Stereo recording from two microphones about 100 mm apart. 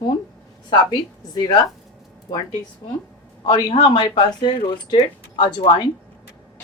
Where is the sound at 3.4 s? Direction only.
50° left (ahead or behind).